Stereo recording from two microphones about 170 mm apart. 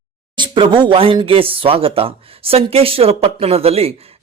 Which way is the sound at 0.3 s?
30° right (ahead or behind).